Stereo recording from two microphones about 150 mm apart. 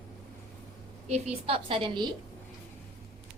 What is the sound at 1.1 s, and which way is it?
A woman's voice, 45° right (ahead or behind).